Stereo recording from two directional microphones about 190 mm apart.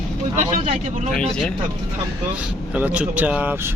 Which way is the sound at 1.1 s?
5° left (ahead or behind).